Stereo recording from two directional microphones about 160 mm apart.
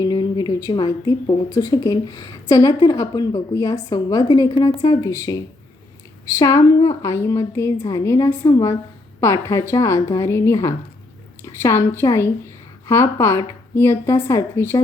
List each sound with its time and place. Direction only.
0.0 s a woman's voice: 25° left (ahead or behind)
4.9 s a woman's voice: 20° left (ahead or behind)
6.4 s a woman's voice: 20° left (ahead or behind)